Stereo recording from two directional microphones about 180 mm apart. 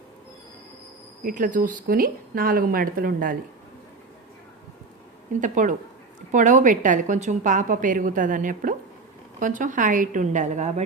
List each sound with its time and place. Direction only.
1.2 s a woman's voice: 45° right (ahead or behind)
5.4 s a woman's voice: 45° right (ahead or behind)